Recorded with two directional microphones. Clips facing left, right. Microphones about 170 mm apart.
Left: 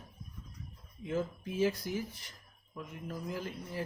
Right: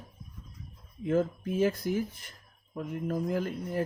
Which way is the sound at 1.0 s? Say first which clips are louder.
Right 7 dB; 50° right (ahead or behind).